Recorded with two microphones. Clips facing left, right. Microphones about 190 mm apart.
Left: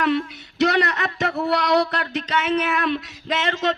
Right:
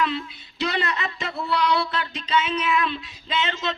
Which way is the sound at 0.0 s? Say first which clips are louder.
Left 5 dB; 65° left (ahead or behind).